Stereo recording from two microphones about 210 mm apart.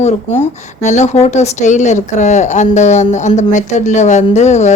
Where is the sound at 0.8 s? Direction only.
35° left (ahead or behind).